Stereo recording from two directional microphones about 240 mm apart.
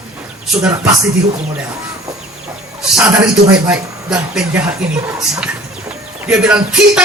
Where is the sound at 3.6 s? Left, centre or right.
Centre.